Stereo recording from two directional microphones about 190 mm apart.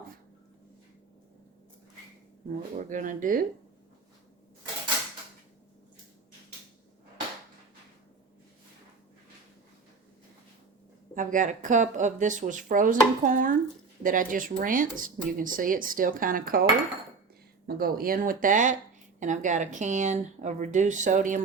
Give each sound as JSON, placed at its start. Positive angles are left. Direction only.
{"t": 2.7, "sound": "speech", "side_deg": -40}
{"t": 11.1, "sound": "speech", "side_deg": -45}